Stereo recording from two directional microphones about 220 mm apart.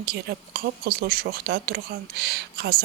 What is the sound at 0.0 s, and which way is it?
Speech, 45° right (ahead or behind).